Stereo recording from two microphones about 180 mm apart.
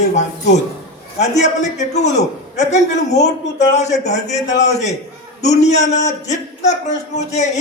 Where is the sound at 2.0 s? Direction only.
40° left (ahead or behind).